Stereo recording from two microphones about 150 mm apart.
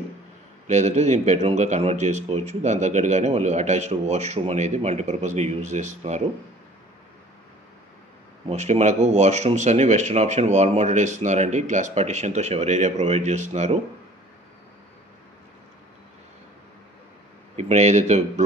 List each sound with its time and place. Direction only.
0.7 s speech: 50° right (ahead or behind)
8.5 s speech: 50° right (ahead or behind)
17.6 s speech: 45° right (ahead or behind)